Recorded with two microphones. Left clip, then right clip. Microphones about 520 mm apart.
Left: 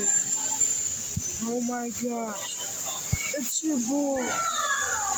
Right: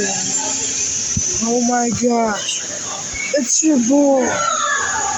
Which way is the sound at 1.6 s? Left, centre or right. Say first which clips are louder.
Right 14 dB; left.